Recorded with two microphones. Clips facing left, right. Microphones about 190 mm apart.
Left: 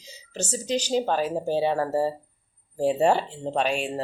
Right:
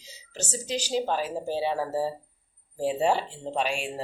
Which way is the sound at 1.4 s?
45° left (ahead or behind).